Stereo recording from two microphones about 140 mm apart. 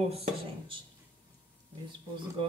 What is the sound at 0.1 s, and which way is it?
Speech, 40° right (ahead or behind).